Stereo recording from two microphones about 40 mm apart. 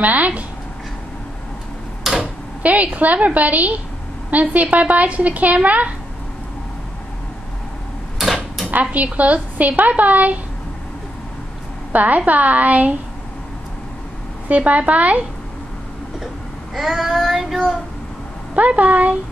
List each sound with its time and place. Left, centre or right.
0.0 s a woman's voice: right
2.1 s tick-tock: centre
2.6 s a woman's voice: right
8.2 s a sound: centre
8.9 s a woman's voice: right
11.9 s a woman's voice: right
14.5 s a woman's voice: right
16.7 s child singing: centre
18.6 s a woman's voice: right